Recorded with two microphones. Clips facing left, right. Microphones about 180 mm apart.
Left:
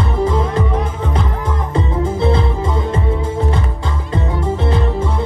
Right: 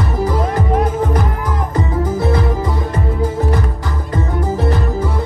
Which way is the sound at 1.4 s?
25° left (ahead or behind).